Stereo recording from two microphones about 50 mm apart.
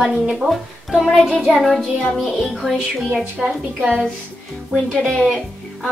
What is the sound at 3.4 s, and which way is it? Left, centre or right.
Speech, centre.